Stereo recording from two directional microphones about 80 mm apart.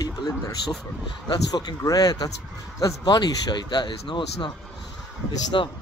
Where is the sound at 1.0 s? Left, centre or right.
Left.